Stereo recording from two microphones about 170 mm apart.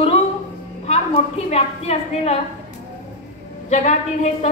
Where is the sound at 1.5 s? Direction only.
40° left (ahead or behind).